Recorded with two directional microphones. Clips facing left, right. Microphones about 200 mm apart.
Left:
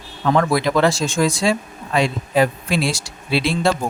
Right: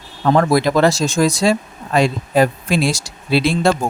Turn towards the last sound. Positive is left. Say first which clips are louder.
# right 3 dB
turn(degrees=-45)  # may be behind; listen again after turning